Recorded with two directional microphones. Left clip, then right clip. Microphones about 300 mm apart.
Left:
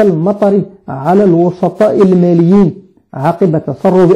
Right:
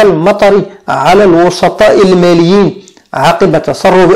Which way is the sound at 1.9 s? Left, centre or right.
Right.